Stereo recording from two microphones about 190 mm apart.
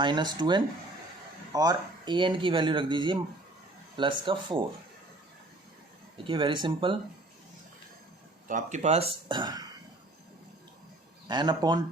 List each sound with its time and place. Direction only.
0.0 s speech: 25° right (ahead or behind)
6.2 s speech: 25° right (ahead or behind)
8.4 s speech: 40° right (ahead or behind); by 9.6 s 20° right (ahead or behind)
11.3 s speech: 25° right (ahead or behind)